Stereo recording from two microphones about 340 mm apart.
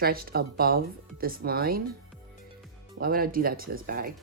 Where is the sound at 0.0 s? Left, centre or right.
Right.